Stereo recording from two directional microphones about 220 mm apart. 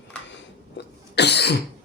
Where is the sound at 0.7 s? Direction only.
50° left (ahead or behind).